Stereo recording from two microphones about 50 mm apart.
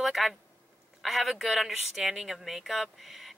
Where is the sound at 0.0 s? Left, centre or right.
Centre.